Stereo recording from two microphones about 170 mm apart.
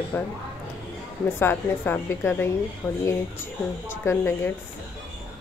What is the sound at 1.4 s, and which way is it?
Speech, 15° left (ahead or behind).